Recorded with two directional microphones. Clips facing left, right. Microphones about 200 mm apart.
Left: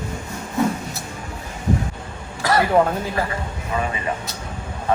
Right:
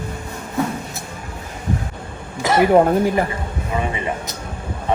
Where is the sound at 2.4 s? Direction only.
20° right (ahead or behind).